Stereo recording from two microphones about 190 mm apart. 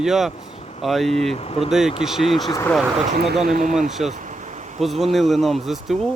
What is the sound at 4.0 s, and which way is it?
Speech, centre (ahead or behind).